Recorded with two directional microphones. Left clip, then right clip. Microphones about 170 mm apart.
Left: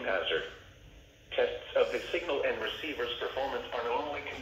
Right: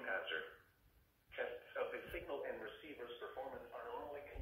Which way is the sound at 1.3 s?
30° left (ahead or behind).